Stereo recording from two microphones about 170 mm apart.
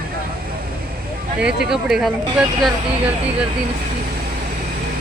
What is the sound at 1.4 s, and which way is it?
Speech, 5° right (ahead or behind).